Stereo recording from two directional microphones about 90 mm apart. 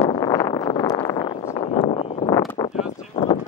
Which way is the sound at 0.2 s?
45° left (ahead or behind).